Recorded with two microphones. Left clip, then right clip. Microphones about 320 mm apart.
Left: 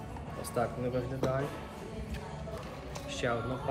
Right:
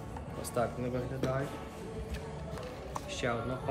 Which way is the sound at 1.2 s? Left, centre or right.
Centre.